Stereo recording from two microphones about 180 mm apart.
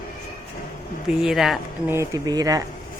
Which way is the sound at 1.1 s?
5° right (ahead or behind).